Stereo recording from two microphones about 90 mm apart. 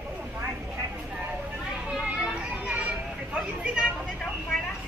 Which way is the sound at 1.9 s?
10° right (ahead or behind).